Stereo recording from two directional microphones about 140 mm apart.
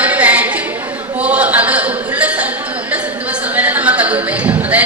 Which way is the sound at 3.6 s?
10° right (ahead or behind).